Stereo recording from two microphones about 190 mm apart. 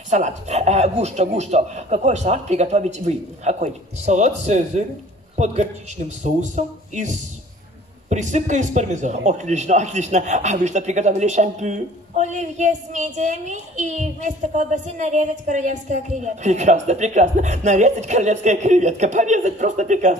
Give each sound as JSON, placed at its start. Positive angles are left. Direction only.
{"t": 0.1, "sound": "a man's voice", "side_deg": -35}